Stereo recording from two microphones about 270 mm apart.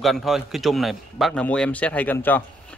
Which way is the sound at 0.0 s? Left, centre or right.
Centre.